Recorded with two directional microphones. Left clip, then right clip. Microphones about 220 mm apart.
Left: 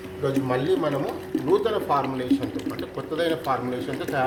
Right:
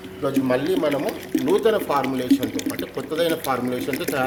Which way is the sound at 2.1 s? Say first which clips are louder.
Right 4 dB; 50° right (ahead or behind).